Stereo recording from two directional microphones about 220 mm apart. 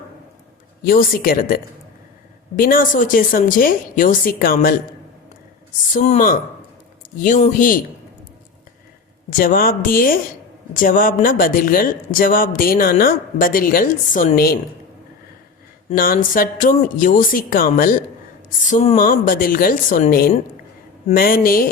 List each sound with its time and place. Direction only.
0.9 s speech: 40° left (ahead or behind)
5.9 s speech: 35° left (ahead or behind)
9.4 s speech: 40° left (ahead or behind)
15.9 s speech: 40° left (ahead or behind)